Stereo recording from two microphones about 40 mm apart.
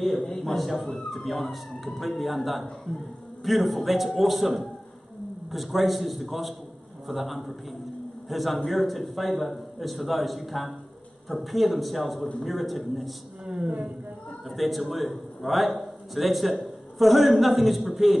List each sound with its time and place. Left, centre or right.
0.2 s a man's voice: centre
13.6 s speech: right
14.5 s a man's voice: centre